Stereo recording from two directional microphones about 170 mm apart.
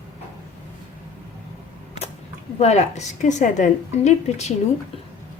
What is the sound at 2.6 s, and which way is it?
A woman's voice, 40° left (ahead or behind).